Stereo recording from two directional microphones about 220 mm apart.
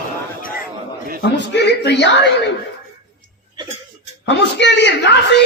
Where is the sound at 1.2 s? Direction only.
50° left (ahead or behind).